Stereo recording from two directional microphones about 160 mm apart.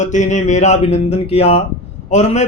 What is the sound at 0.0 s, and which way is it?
A man's voice, 50° left (ahead or behind).